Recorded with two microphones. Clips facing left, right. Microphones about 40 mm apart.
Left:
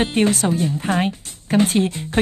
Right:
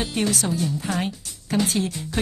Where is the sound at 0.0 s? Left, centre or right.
Left.